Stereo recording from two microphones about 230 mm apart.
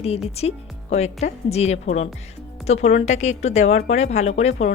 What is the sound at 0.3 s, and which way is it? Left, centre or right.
Speech, left.